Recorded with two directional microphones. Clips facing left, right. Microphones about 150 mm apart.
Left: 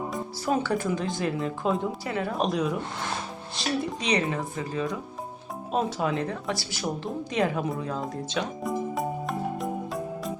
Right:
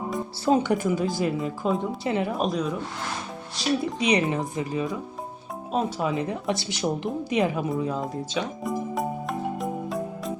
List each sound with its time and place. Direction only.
0.4 s a woman's voice: 20° right (ahead or behind)
0.9 s speech: 5° right (ahead or behind)
2.0 s speech: 20° right (ahead or behind)
2.4 s speech: centre (ahead or behind)
4.1 s a woman's voice: 20° right (ahead or behind)
5.7 s speech: centre (ahead or behind)
6.2 s a woman's voice: 20° right (ahead or behind)
7.6 s music: 5° right (ahead or behind)